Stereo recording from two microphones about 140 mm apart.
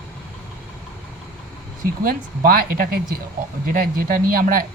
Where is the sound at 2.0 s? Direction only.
90° right.